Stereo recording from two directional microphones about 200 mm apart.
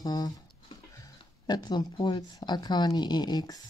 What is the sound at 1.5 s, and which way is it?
Speech, 20° left (ahead or behind).